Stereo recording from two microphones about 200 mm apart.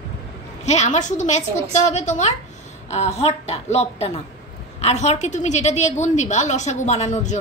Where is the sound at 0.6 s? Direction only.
35° left (ahead or behind).